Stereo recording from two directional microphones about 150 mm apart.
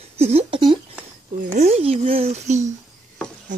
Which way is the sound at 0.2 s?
45° right (ahead or behind).